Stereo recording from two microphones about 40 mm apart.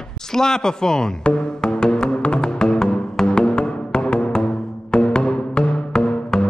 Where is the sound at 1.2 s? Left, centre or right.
Left.